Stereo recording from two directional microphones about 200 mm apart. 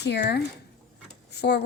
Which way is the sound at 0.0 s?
55° left (ahead or behind).